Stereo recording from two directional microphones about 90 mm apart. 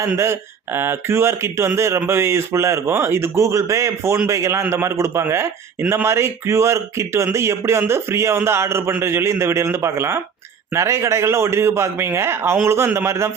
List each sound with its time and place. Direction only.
0.2 s a man's voice: 30° right (ahead or behind)